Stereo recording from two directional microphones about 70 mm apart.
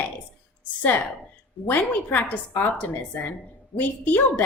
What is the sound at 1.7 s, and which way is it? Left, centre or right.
A woman's voice, left.